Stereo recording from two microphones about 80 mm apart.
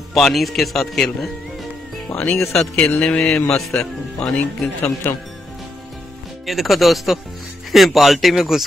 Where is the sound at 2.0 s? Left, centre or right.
Left.